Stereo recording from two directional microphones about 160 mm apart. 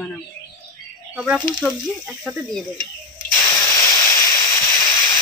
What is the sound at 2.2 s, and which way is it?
Speech, centre (ahead or behind).